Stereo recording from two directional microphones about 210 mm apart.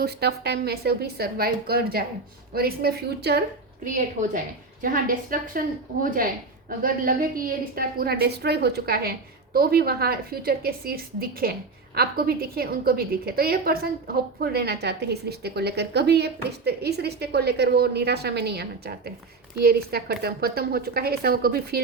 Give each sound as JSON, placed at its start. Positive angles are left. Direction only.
{"t": 0.0, "sound": "a woman's voice", "side_deg": -50}
{"t": 4.8, "sound": "a woman's voice", "side_deg": -40}